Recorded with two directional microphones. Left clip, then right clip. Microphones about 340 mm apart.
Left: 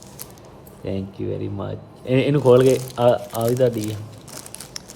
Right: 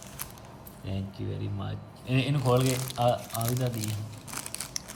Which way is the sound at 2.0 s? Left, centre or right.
Left.